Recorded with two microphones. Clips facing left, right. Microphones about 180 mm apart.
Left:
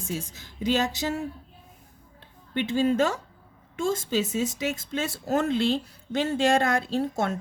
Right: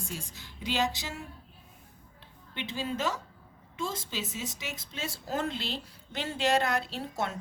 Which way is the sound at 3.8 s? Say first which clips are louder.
Left 12 dB; 50° left (ahead or behind).